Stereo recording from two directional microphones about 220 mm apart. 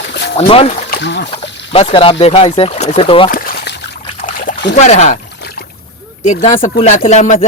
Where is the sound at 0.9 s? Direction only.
50° left (ahead or behind).